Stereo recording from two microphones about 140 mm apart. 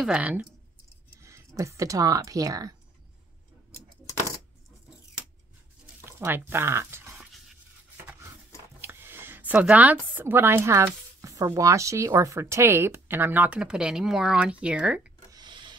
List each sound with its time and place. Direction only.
0.0 s speech: 10° right (ahead or behind)
1.1 s speech: 20° right (ahead or behind)
6.0 s speech: 15° right (ahead or behind)
8.8 s speech: 15° right (ahead or behind)
15.3 s a sound: 35° right (ahead or behind)